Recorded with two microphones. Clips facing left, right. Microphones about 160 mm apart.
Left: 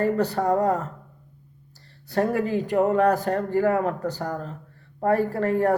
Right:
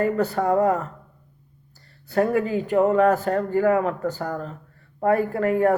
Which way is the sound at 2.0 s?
35° left (ahead or behind).